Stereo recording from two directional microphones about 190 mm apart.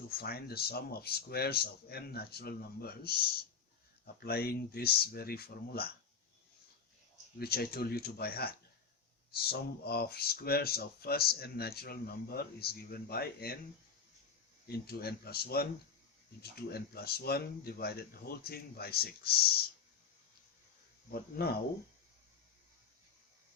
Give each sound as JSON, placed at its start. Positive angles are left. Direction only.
{"t": 0.1, "sound": "speech", "side_deg": 55}
{"t": 7.3, "sound": "speech", "side_deg": 55}
{"t": 14.7, "sound": "speech", "side_deg": 55}
{"t": 21.1, "sound": "speech", "side_deg": 55}